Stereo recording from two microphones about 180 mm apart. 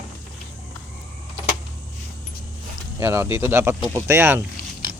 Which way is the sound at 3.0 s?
15° right (ahead or behind).